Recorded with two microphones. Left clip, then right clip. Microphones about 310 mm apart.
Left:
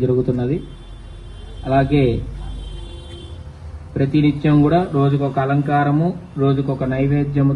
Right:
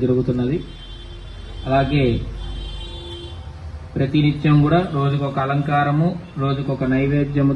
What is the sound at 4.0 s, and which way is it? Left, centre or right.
A man's voice, left.